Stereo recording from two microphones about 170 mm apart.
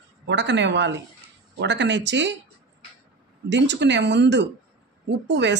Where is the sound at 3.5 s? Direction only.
90° right.